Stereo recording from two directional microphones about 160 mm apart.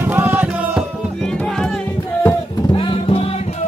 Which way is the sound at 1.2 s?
5° left (ahead or behind).